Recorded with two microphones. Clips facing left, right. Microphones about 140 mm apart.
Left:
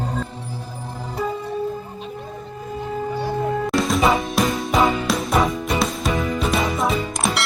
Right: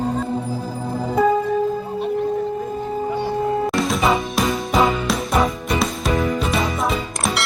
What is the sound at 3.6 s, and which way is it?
Music, centre (ahead or behind).